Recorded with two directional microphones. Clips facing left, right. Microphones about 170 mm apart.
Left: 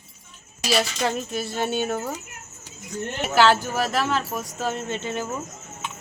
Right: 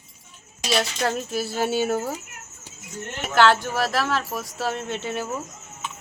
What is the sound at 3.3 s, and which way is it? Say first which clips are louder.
Speech: even; 5° left (ahead or behind).